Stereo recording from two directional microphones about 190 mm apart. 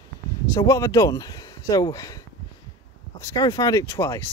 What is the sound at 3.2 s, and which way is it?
Speech, 20° left (ahead or behind).